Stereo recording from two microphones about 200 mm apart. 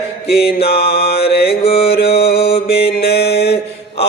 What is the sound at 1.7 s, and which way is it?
Mantra, 30° left (ahead or behind).